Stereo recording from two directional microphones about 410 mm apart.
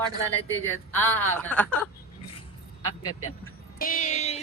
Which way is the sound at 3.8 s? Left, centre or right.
Centre.